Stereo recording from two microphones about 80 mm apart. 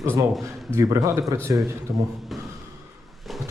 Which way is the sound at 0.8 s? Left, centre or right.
Right.